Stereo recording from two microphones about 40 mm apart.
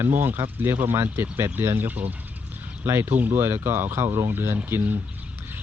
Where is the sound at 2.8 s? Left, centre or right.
Right.